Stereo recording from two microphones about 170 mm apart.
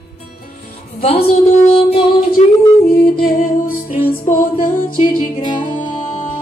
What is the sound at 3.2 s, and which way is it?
Music, 55° left (ahead or behind).